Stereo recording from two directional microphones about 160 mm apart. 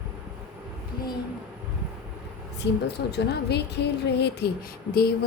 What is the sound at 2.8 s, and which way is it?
A woman's voice, 90° left.